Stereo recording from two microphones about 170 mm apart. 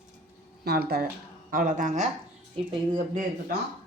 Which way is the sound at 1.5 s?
55° right (ahead or behind).